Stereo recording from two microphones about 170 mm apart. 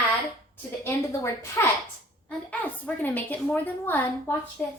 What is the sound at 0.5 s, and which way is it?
A woman's voice, 15° left (ahead or behind).